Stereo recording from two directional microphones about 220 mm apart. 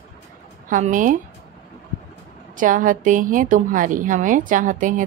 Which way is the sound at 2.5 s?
35° right (ahead or behind).